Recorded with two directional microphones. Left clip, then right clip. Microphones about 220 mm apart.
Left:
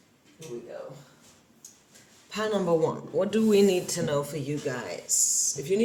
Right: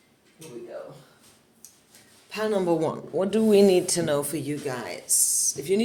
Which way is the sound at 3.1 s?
10° right (ahead or behind).